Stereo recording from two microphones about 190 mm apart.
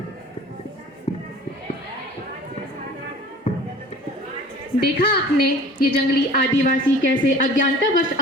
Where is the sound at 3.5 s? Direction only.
35° left (ahead or behind).